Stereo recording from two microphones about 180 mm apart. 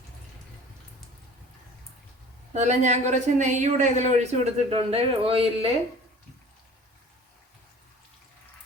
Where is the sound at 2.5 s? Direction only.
40° right (ahead or behind).